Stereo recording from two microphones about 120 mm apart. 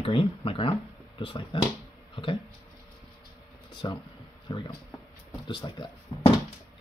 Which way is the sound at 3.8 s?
35° left (ahead or behind).